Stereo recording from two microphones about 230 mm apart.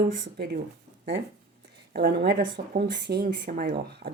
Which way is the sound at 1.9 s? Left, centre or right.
Right.